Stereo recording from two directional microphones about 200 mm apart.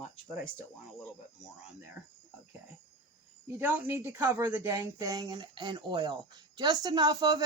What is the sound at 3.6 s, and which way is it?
Speech, 10° right (ahead or behind).